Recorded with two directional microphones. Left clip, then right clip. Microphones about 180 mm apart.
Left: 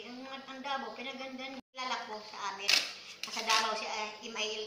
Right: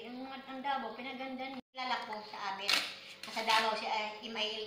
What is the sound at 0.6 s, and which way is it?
A woman's voice, centre (ahead or behind).